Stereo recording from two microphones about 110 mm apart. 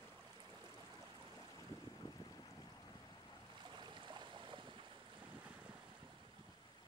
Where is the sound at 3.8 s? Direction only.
45° right (ahead or behind).